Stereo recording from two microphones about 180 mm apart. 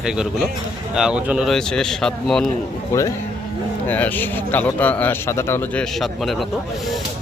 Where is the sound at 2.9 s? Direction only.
15° left (ahead or behind).